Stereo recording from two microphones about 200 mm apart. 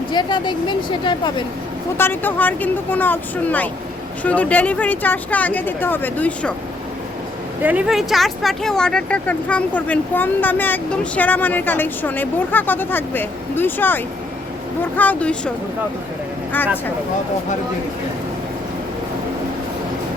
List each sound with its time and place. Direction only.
0.1 s speech: 20° left (ahead or behind)
2.0 s speech: 10° left (ahead or behind)
7.6 s speech: 5° right (ahead or behind)